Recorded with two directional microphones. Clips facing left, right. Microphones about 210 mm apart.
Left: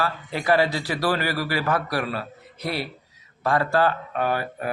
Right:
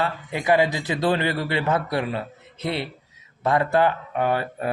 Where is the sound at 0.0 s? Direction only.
20° right (ahead or behind).